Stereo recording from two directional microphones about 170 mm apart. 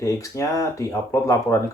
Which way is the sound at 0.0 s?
20° left (ahead or behind).